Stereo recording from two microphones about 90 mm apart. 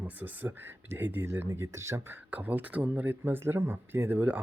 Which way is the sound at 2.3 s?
20° right (ahead or behind).